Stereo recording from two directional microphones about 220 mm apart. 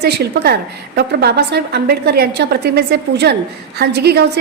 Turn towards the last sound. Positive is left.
turn(degrees=-50)  # may be behind; listen again after turning